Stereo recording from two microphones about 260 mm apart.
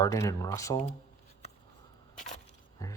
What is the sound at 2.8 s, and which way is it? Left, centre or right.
Speech, centre.